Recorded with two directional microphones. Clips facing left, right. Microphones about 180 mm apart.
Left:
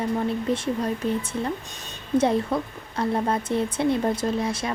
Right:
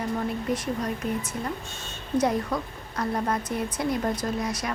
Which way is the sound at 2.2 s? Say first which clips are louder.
Left 2 dB; 25° left (ahead or behind).